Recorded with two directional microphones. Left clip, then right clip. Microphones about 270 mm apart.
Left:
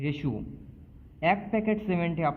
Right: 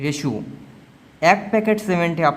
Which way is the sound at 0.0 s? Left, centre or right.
Right.